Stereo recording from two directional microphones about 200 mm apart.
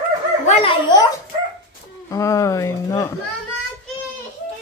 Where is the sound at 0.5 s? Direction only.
30° left (ahead or behind).